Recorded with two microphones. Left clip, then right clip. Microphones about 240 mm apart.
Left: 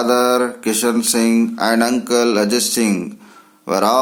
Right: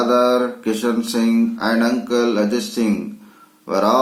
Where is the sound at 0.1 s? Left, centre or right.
Left.